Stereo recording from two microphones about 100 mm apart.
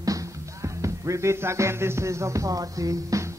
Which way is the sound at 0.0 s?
35° right (ahead or behind).